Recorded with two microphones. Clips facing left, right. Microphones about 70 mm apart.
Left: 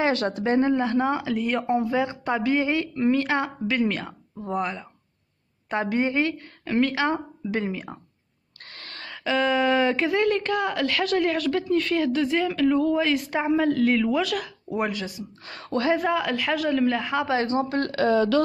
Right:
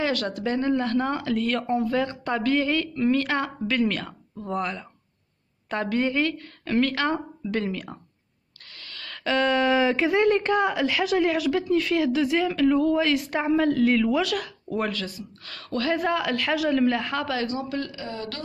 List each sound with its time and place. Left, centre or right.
0.0 s speech: left
8.6 s a sound: left
9.1 s a woman's voice: centre
10.1 s a woman's voice: right; by 14.8 s centre
14.8 s speech: centre
16.0 s a woman's voice: centre
17.3 s speech: left